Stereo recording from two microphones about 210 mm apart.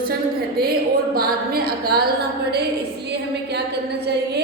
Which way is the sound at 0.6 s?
45° right (ahead or behind).